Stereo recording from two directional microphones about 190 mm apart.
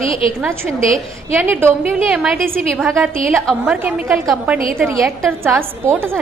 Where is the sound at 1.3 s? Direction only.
10° right (ahead or behind).